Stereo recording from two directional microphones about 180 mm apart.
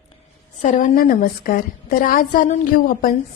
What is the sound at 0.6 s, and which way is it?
A woman's voice, 45° left (ahead or behind).